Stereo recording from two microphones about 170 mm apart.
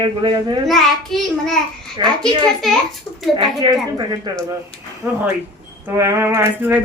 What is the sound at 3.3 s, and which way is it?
Speech, 30° right (ahead or behind).